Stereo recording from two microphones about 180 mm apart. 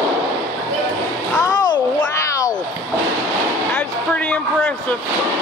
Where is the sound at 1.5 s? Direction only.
20° left (ahead or behind).